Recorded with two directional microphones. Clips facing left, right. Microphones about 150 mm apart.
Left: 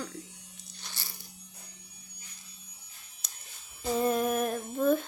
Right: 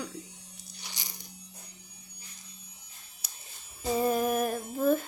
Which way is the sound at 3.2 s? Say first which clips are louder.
Even; 10° right (ahead or behind).